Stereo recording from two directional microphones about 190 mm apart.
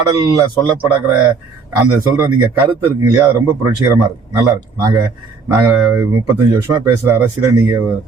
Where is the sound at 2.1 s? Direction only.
15° right (ahead or behind).